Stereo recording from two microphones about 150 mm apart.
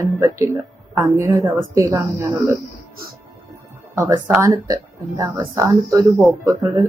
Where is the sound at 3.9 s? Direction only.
15° right (ahead or behind).